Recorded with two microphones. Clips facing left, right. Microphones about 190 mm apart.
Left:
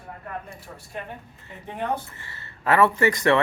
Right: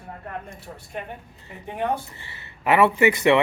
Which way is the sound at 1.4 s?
15° right (ahead or behind).